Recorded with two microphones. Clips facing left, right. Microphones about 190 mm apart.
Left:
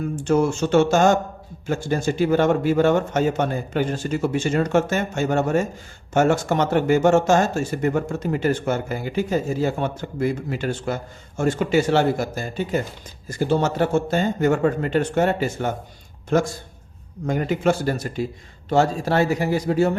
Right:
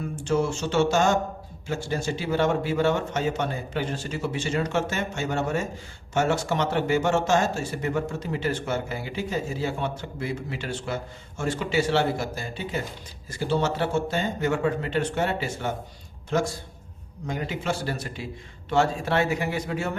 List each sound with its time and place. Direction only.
0.3 s speech: 50° left (ahead or behind)